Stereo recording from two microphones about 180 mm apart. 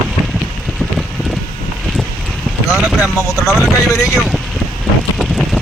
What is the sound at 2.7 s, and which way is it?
Speech, centre (ahead or behind).